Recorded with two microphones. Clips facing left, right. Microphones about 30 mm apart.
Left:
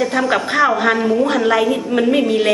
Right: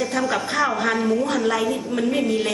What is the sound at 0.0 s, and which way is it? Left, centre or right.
A woman's voice, left.